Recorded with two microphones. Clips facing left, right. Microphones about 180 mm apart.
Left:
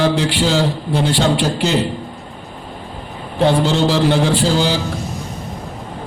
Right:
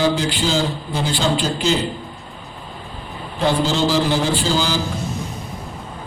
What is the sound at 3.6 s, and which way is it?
A man's voice, 70° left (ahead or behind).